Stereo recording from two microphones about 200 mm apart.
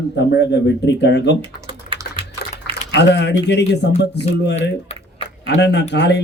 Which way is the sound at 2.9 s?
60° left (ahead or behind).